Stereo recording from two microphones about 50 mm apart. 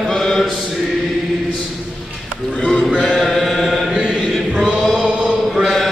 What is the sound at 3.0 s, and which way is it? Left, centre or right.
Chant, centre.